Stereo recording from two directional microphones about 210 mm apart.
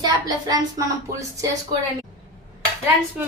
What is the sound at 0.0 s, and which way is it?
Speech, 15° right (ahead or behind).